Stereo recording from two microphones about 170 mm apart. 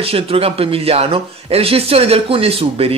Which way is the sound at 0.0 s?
35° right (ahead or behind).